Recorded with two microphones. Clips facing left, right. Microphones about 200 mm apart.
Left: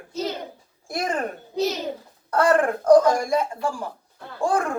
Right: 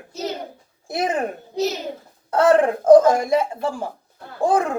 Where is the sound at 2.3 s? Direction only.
20° right (ahead or behind).